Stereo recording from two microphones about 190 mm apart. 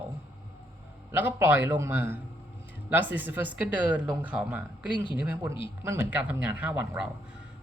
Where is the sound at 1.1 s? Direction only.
10° right (ahead or behind).